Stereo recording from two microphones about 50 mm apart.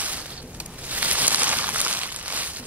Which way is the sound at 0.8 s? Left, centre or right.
Right.